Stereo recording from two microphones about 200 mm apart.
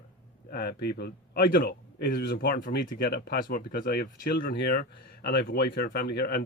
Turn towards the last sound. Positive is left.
turn(degrees=50)  # may be behind; listen again after turning